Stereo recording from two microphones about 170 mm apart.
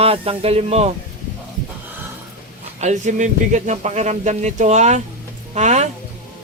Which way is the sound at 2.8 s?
45° right (ahead or behind).